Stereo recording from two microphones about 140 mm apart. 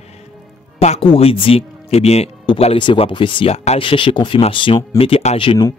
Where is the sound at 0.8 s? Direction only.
45° left (ahead or behind).